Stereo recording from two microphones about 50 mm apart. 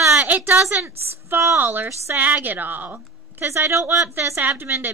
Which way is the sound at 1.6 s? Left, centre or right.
Right.